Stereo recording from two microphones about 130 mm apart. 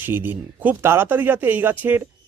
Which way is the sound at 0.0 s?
15° right (ahead or behind).